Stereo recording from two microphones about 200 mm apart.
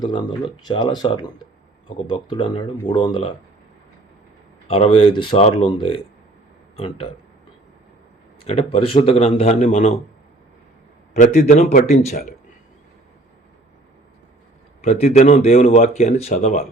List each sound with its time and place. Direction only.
0.0 s speech: 20° left (ahead or behind)
4.7 s speech: 30° left (ahead or behind)
8.4 s speech: 30° left (ahead or behind)
11.1 s speech: 35° left (ahead or behind)
14.8 s speech: 30° left (ahead or behind)